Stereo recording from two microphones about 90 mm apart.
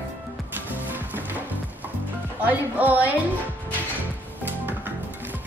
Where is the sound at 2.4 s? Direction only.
20° right (ahead or behind).